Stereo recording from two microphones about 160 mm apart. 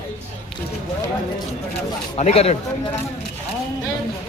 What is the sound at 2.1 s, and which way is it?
Speech, 40° left (ahead or behind).